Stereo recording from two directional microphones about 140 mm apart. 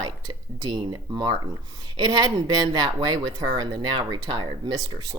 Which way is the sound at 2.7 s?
30° right (ahead or behind).